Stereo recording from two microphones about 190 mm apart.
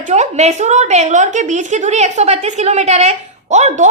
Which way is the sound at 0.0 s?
35° right (ahead or behind).